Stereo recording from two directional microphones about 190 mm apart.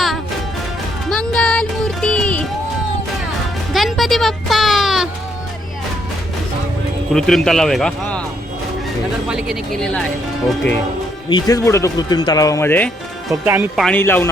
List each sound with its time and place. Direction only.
1.1 s music: 5° left (ahead or behind)
3.7 s music: centre (ahead or behind)
7.1 s speech: centre (ahead or behind)
9.3 s speech: centre (ahead or behind)
11.3 s speech: 20° left (ahead or behind)
13.4 s speech: 10° right (ahead or behind)
13.8 s speech: 10° left (ahead or behind)